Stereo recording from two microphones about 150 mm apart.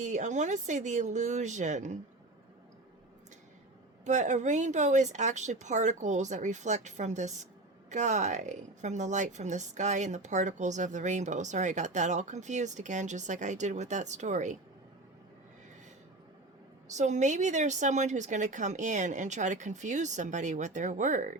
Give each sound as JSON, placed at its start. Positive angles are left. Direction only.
{"t": 0.0, "sound": "a woman's voice", "side_deg": -55}
{"t": 4.0, "sound": "a woman's voice", "side_deg": -55}
{"t": 16.9, "sound": "a woman's voice", "side_deg": -50}